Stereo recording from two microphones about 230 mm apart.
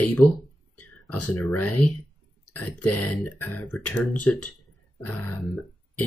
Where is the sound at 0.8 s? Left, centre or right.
Left.